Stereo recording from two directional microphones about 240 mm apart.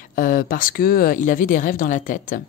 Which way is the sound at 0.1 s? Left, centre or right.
Left.